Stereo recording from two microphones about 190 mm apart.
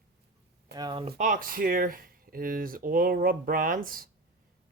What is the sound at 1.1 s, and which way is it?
Speech, 45° right (ahead or behind).